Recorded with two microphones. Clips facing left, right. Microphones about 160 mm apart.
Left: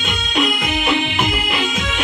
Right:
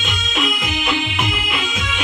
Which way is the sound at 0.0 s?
55° left (ahead or behind).